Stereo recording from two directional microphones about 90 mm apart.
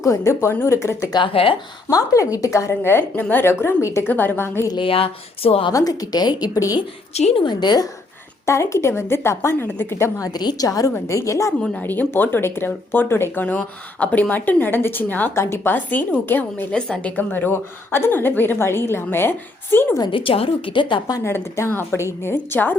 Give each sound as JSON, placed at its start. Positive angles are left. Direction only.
{"t": 0.0, "sound": "a woman's voice", "side_deg": 35}
{"t": 1.1, "sound": "speech", "side_deg": 80}
{"t": 1.9, "sound": "a woman's voice", "side_deg": 40}
{"t": 4.8, "sound": "speech", "side_deg": 90}
{"t": 5.7, "sound": "a woman's voice", "side_deg": 45}
{"t": 7.3, "sound": "a woman's voice", "side_deg": 55}
{"t": 8.4, "sound": "a woman's voice", "side_deg": 30}
{"t": 11.8, "sound": "speech", "side_deg": 20}
{"t": 20.1, "sound": "a woman's voice", "side_deg": 75}
{"t": 21.2, "sound": "speech", "side_deg": 30}